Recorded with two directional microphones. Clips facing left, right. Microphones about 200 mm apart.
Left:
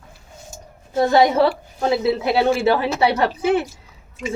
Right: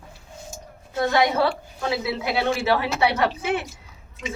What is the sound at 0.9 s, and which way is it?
A woman's voice, 30° left (ahead or behind).